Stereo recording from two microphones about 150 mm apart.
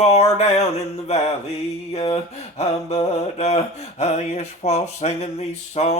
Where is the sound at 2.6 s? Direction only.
45° left (ahead or behind).